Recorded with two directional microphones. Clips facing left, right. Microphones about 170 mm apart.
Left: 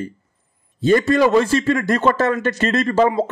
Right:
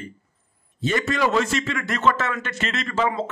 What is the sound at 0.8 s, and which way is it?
A man's voice, 35° left (ahead or behind).